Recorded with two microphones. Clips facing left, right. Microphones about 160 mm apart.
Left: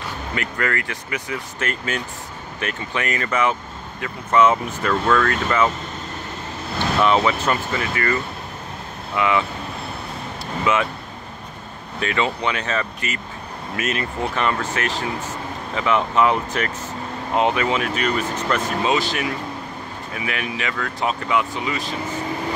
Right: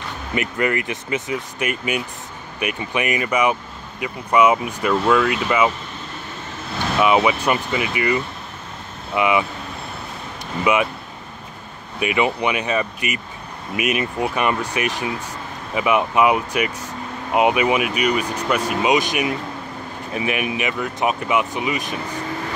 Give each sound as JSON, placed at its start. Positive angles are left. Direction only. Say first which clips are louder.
{"t": 0.3, "sound": "speech", "louder": "right 4 dB", "side_deg": -20}
{"t": 7.0, "sound": "speech", "louder": "right 2 dB", "side_deg": -10}
{"t": 10.6, "sound": "speech", "louder": "right 2 dB", "side_deg": -15}
{"t": 12.0, "sound": "speech", "louder": "right 3 dB", "side_deg": -15}